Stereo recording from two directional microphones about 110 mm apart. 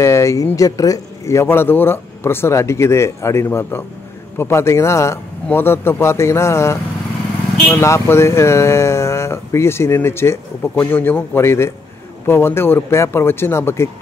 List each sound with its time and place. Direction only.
0.0 s speech: 25° left (ahead or behind)
7.8 s speech: 25° left (ahead or behind)